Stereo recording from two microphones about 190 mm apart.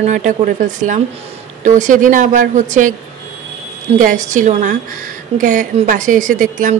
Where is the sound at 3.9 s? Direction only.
40° right (ahead or behind).